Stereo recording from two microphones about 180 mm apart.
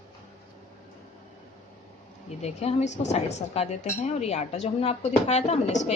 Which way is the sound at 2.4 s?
35° left (ahead or behind).